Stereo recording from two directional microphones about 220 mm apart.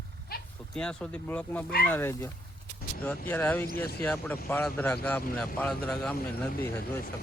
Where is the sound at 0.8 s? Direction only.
5° left (ahead or behind).